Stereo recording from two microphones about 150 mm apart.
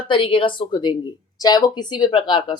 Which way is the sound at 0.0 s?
35° left (ahead or behind).